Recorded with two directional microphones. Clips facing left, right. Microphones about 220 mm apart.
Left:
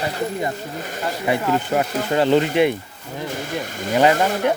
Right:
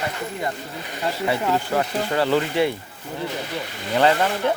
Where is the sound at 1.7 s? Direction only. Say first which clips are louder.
Left 2 dB; 20° left (ahead or behind).